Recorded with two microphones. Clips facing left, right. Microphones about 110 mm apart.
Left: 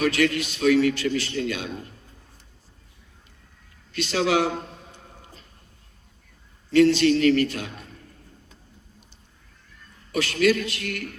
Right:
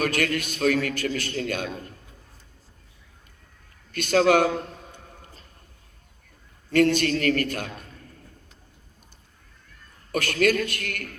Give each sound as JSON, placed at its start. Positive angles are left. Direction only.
{"t": 0.0, "sound": "a man's voice", "side_deg": -50}
{"t": 3.9, "sound": "a man's voice", "side_deg": -50}
{"t": 6.7, "sound": "a man's voice", "side_deg": -50}
{"t": 10.1, "sound": "a man's voice", "side_deg": -50}